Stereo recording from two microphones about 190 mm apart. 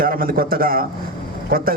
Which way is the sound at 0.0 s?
50° right (ahead or behind).